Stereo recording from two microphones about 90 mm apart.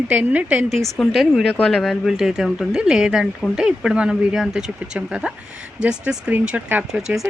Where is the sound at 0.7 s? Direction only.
Centre (ahead or behind).